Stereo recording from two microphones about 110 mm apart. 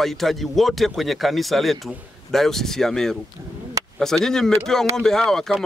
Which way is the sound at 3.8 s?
30° right (ahead or behind).